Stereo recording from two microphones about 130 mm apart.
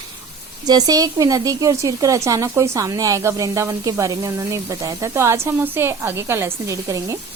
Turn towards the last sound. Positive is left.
turn(degrees=-25)  # may be behind; listen again after turning